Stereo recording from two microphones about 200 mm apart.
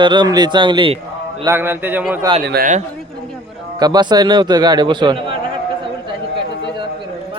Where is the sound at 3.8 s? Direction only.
20° right (ahead or behind).